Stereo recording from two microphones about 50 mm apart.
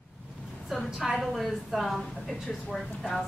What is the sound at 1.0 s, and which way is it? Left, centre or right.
A woman's voice, centre.